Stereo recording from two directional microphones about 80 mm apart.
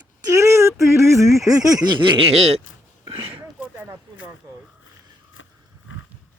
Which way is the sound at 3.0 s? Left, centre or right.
Right.